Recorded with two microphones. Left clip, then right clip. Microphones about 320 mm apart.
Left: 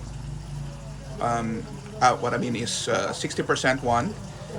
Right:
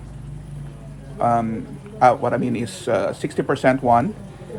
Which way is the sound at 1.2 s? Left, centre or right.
Centre.